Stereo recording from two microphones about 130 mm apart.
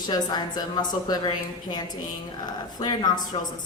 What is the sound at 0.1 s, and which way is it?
A woman's voice, 30° left (ahead or behind).